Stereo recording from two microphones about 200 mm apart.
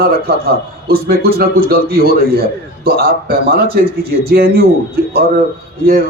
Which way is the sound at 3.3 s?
50° right (ahead or behind).